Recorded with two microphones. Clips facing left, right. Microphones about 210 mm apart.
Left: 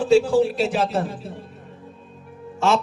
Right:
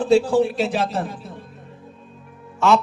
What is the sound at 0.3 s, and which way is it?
Speech, 35° left (ahead or behind).